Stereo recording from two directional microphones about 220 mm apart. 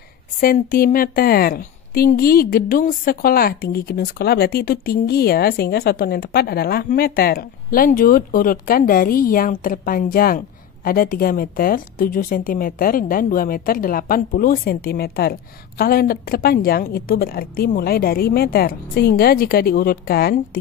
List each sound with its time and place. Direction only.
0.4 s a woman's voice: 40° left (ahead or behind)